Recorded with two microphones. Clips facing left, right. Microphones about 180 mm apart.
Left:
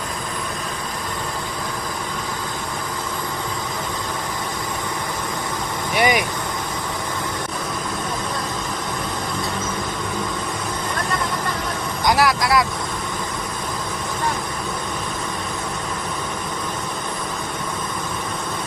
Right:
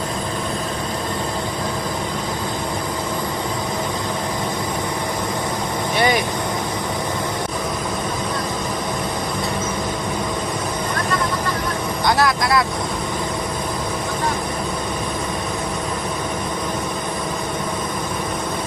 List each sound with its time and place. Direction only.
6.0 s vehicle: 15° left (ahead or behind)
12.0 s vehicle: 15° left (ahead or behind)